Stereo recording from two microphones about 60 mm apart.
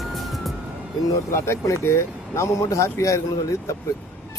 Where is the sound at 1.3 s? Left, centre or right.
Left.